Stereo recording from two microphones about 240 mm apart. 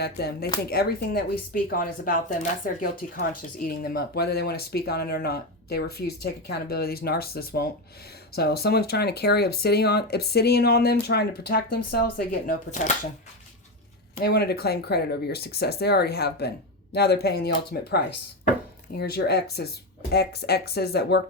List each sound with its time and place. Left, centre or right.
0.0 s speech: left
14.2 s speech: left
19.1 s speech: left